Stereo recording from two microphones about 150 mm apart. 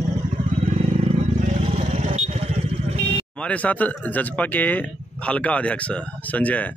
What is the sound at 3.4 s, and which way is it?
Speech, 10° left (ahead or behind).